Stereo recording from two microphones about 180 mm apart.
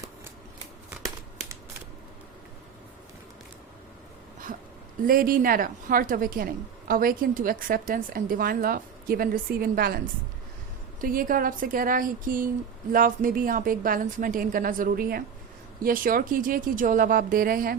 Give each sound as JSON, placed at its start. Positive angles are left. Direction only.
{"t": 5.0, "sound": "a woman's voice", "side_deg": -50}
{"t": 11.0, "sound": "a woman's voice", "side_deg": -50}